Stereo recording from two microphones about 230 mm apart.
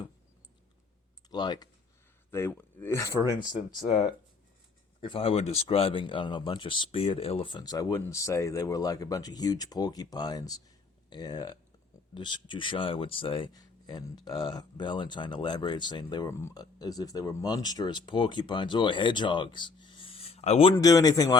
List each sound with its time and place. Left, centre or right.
1.3 s speech: centre
3.8 s speech: left
20.7 s speech: centre